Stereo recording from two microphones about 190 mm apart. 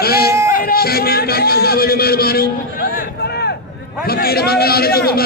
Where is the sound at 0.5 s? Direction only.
50° left (ahead or behind).